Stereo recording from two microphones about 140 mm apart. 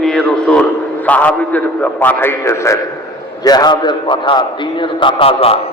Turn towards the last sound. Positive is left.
turn(degrees=45)  # may be behind; listen again after turning